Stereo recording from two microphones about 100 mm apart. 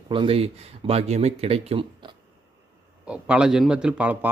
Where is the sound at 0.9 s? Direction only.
90° right; by 2.1 s 70° right (ahead or behind).